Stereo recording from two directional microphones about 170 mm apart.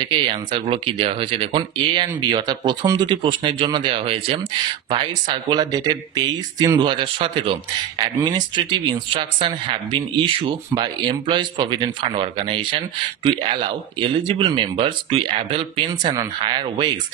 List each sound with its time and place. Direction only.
0.0 s speech: 30° right (ahead or behind)